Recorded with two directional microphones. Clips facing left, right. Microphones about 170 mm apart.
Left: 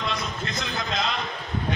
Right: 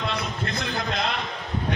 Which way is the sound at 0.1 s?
60° right (ahead or behind).